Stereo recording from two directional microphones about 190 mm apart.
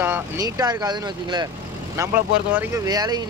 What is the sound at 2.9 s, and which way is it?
Speech, 20° right (ahead or behind).